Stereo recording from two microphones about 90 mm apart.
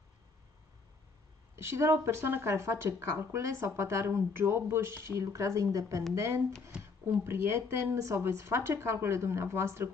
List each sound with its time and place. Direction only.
1.6 s speech: 30° right (ahead or behind)